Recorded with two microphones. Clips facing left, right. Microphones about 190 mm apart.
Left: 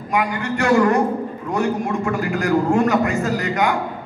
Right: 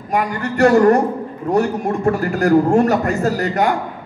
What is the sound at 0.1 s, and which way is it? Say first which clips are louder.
A man's voice: right 1 dB; 40° right (ahead or behind).